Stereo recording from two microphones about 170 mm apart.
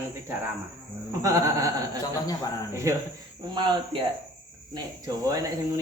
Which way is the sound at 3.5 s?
25° right (ahead or behind).